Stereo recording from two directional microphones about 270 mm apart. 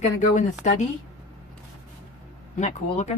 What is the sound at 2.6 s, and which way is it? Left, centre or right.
Speech, left.